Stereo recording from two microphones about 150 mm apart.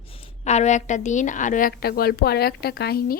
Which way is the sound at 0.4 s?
50° left (ahead or behind).